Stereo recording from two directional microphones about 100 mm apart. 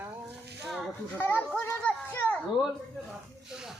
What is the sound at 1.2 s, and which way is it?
Speech, 15° left (ahead or behind).